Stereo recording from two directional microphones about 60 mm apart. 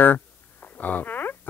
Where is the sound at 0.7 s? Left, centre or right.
Left.